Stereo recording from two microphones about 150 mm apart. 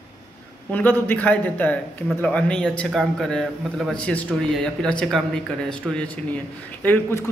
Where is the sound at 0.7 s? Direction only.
10° left (ahead or behind).